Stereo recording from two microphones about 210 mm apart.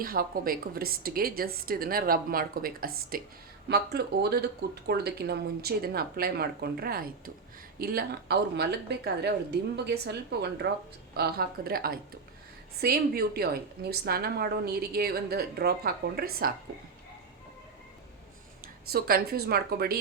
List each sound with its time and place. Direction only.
0.0 s speech: 45° right (ahead or behind)
18.9 s speech: 45° right (ahead or behind)